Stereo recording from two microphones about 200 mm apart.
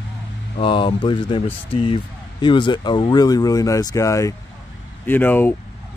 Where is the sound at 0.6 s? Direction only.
25° left (ahead or behind).